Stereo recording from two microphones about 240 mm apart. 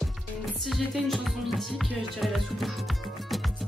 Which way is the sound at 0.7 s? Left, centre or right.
Centre.